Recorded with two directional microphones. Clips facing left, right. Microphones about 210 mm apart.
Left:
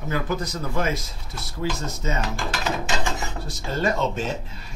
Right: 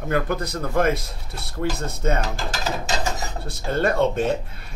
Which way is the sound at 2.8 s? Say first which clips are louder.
Right 1 dB; 35° right (ahead or behind).